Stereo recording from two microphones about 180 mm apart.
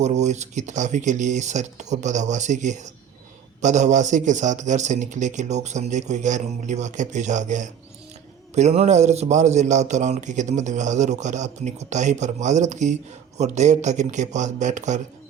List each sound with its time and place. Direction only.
0.0 s a man's voice: 40° right (ahead or behind)